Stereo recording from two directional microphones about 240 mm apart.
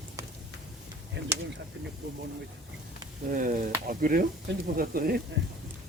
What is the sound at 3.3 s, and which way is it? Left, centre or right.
Speech, right.